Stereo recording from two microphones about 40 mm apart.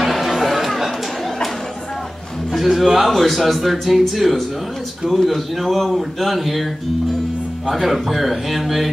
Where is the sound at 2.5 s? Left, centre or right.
Centre.